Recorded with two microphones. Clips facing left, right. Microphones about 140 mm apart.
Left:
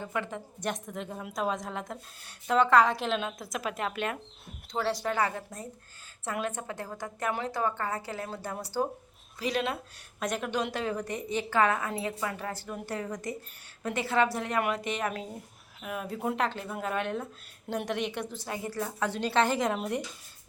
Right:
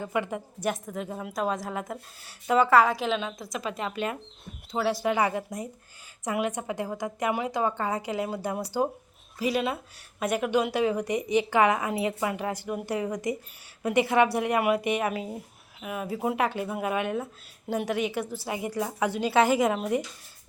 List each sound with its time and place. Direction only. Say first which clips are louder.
0.0 s a woman's voice: right 5 dB; 10° right (ahead or behind)